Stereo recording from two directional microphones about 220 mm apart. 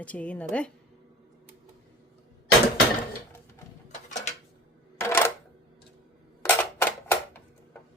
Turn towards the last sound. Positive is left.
turn(degrees=10)  # may be behind; listen again after turning